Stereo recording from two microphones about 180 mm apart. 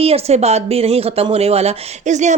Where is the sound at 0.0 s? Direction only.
35° right (ahead or behind).